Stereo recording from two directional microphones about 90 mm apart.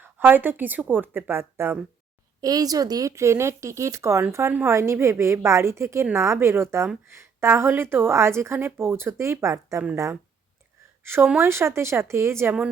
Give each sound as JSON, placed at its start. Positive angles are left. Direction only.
{"t": 0.0, "sound": "a woman's voice", "side_deg": -20}
{"t": 2.4, "sound": "a woman's voice", "side_deg": -45}